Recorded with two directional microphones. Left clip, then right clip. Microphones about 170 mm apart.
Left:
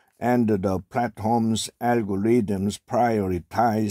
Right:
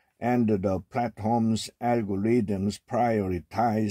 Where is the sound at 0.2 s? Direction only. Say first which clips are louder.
Left 3 dB; 30° left (ahead or behind).